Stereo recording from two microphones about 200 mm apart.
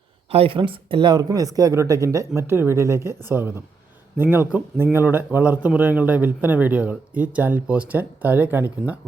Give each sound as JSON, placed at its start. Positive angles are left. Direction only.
{"t": 0.3, "sound": "a man's voice", "side_deg": -30}